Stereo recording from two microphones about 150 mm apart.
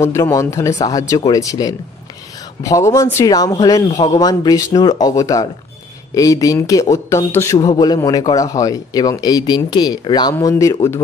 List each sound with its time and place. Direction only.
0.0 s speech: 20° left (ahead or behind)